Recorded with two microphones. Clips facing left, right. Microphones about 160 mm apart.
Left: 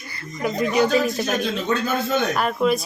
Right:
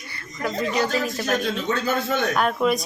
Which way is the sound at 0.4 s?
15° left (ahead or behind).